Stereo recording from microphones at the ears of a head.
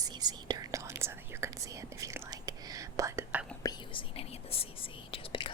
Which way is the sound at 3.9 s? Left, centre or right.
Left.